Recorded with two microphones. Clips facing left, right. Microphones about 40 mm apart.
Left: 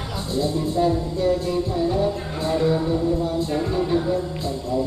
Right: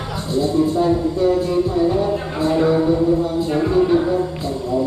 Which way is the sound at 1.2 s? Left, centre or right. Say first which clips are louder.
Right 3 dB; centre.